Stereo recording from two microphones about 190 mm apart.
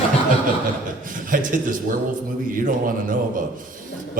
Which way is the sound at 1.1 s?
45° right (ahead or behind).